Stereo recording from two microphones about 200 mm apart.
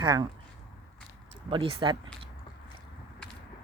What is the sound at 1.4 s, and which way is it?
Speech, 25° right (ahead or behind).